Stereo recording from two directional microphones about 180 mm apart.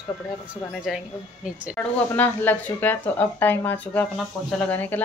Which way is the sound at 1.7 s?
10° left (ahead or behind).